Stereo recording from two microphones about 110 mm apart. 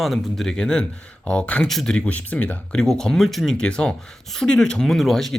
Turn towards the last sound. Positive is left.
turn(degrees=0)  # may be behind; listen again after turning